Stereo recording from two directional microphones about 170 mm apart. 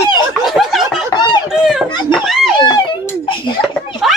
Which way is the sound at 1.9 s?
25° left (ahead or behind).